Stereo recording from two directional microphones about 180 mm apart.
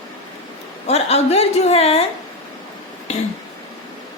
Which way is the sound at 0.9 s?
35° left (ahead or behind).